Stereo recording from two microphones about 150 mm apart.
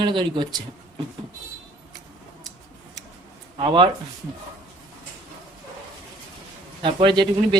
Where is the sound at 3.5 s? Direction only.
35° right (ahead or behind).